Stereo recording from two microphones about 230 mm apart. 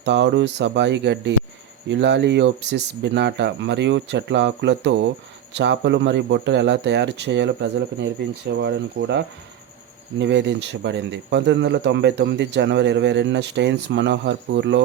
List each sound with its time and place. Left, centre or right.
0.0 s speech: right